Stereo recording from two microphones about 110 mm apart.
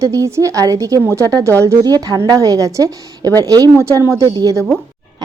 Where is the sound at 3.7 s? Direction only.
25° right (ahead or behind).